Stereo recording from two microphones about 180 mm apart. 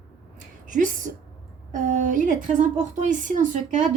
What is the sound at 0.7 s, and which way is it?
A woman's voice, 45° right (ahead or behind).